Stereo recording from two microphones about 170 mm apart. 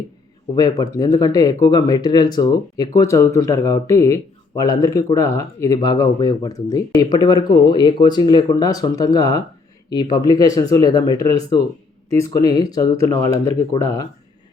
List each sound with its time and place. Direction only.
0.5 s speech: 25° left (ahead or behind)